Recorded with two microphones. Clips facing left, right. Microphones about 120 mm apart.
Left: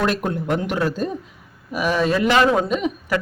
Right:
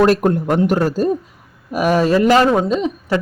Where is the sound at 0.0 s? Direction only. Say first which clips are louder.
Right 8 dB; 45° right (ahead or behind).